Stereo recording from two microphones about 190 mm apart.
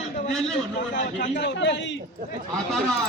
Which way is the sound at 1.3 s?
70° left (ahead or behind).